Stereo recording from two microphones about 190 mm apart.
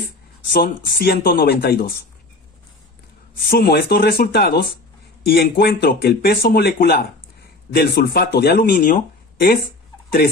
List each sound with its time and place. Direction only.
0.5 s speech: 55° left (ahead or behind)
3.4 s speech: 55° left (ahead or behind)